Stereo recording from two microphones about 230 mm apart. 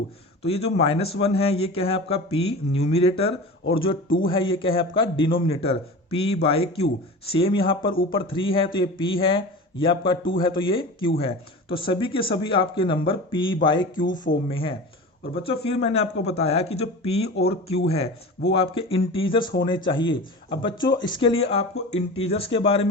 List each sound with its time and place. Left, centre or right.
0.4 s a man's voice: left
17.2 s speech: left
17.5 s a man's voice: left